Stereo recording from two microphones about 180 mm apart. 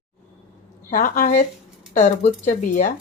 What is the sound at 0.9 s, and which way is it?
Speech, 50° left (ahead or behind).